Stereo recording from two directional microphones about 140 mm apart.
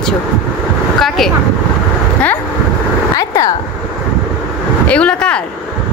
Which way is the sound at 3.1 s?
25° left (ahead or behind).